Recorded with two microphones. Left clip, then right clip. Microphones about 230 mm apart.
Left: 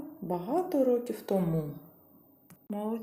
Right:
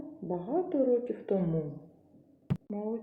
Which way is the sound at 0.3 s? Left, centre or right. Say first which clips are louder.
Left 1 dB; left.